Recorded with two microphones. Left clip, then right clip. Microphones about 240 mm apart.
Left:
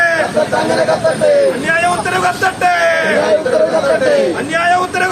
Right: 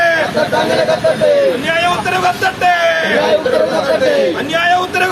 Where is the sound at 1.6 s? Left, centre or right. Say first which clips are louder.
Even; centre.